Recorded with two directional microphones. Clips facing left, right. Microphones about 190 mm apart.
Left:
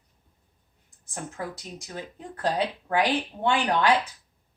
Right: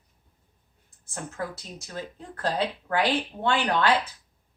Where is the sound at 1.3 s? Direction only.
15° left (ahead or behind).